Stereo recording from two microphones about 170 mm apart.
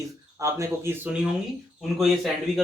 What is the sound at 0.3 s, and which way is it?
Speech, 15° right (ahead or behind).